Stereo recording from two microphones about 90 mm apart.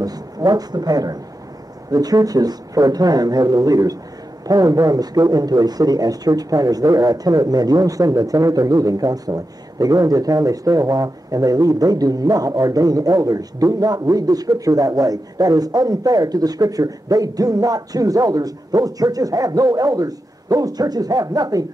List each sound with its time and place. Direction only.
0.0 s speech: 45° right (ahead or behind)